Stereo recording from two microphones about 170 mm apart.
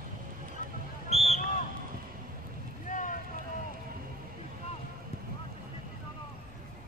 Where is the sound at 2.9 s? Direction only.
50° left (ahead or behind).